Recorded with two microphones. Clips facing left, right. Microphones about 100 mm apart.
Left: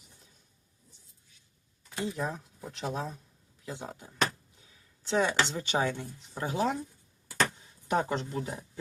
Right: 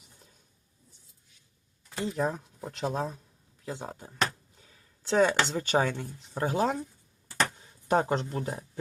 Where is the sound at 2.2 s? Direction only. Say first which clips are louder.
Right 5 dB; 40° right (ahead or behind).